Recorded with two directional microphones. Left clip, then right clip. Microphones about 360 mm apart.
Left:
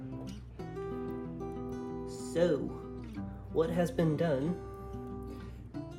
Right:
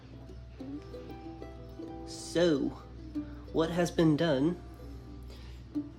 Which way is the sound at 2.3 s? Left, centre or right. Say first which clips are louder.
Right 2 dB; right.